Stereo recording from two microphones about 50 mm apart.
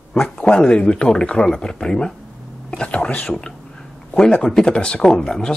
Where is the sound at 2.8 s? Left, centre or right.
Left.